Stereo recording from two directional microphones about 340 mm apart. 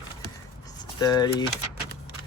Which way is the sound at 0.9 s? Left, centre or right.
Centre.